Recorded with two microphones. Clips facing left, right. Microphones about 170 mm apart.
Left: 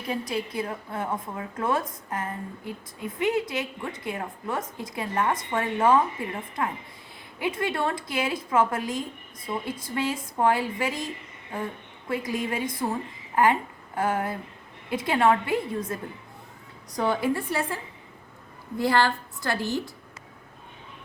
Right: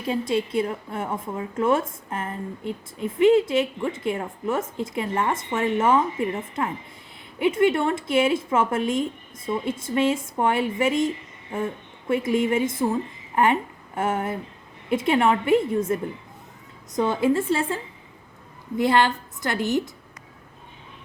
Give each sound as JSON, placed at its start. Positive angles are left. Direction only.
{"t": 0.1, "sound": "a woman's voice", "side_deg": -25}
{"t": 18.8, "sound": "a woman's voice", "side_deg": -20}